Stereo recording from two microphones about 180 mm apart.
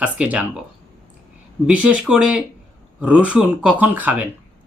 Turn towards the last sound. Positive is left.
turn(degrees=-10)  # may be behind; listen again after turning